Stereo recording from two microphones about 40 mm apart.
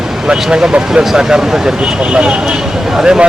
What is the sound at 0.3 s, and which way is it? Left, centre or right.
Speech, right.